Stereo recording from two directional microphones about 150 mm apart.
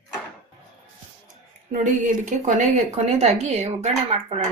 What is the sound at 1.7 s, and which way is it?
Speech, 55° right (ahead or behind).